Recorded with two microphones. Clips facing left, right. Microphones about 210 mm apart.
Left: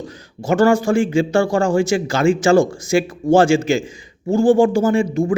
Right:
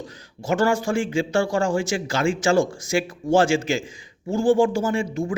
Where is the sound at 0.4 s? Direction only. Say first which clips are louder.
Left 6 dB; 50° left (ahead or behind).